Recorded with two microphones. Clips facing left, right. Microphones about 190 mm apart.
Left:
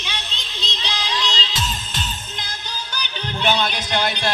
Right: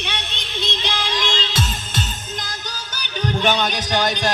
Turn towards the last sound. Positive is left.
turn(degrees=-45)  # may be behind; listen again after turning